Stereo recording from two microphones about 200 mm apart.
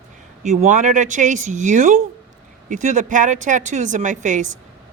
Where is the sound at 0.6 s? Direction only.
40° right (ahead or behind).